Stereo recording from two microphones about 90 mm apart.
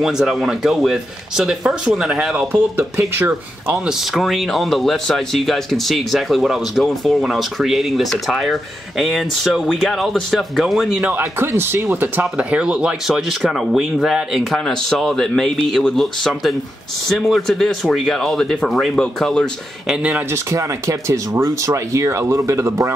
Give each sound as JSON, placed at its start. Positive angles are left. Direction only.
{"t": 0.0, "sound": "speech", "side_deg": -5}
{"t": 3.0, "sound": "speech", "side_deg": -25}
{"t": 3.7, "sound": "speech", "side_deg": -5}
{"t": 11.1, "sound": "speech", "side_deg": -25}
{"t": 19.9, "sound": "speech", "side_deg": -15}
{"t": 20.2, "sound": "speech", "side_deg": -35}